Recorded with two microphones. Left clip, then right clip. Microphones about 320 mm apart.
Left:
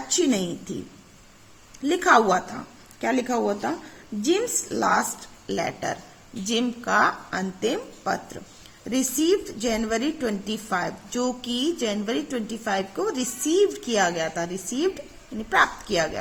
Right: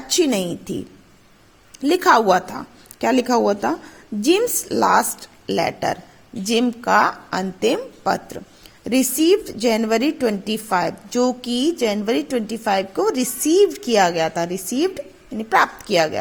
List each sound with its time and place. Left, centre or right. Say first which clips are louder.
0.1 s a woman's voice: right 5 dB; right
1.8 s a woman's voice: right 4 dB; right